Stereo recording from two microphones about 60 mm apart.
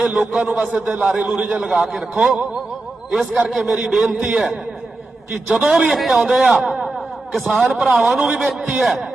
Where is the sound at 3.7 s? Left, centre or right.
Centre.